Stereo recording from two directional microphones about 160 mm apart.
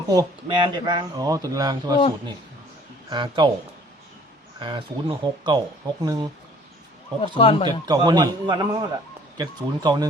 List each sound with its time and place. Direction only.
0.1 s speech: 25° right (ahead or behind)
3.1 s speech: 30° right (ahead or behind)
4.6 s speech: 30° right (ahead or behind)
7.3 s speech: 35° left (ahead or behind)
7.9 s speech: 25° right (ahead or behind)